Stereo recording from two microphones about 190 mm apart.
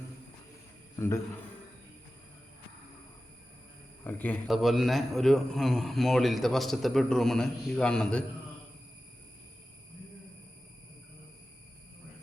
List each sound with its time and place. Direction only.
0.9 s a man's voice: 15° left (ahead or behind)
4.0 s a man's voice: 10° left (ahead or behind)